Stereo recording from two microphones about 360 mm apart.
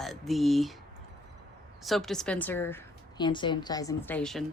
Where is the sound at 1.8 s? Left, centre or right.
Centre.